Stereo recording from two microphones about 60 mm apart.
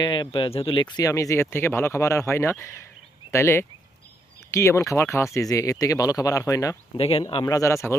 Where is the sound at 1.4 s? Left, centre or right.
Left.